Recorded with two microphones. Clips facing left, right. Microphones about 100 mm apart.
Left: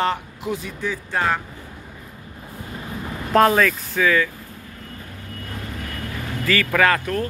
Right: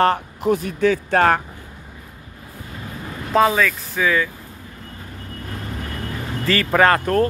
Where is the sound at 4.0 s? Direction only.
15° right (ahead or behind).